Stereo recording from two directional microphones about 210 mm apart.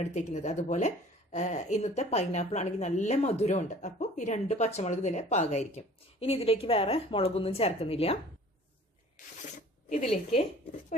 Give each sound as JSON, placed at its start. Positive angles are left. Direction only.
{"t": 0.0, "sound": "a woman's voice", "side_deg": 35}